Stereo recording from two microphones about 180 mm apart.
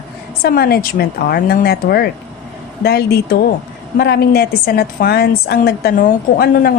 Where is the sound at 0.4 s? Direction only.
60° left (ahead or behind).